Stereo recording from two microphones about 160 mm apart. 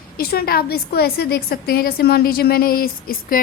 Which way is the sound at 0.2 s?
70° left (ahead or behind).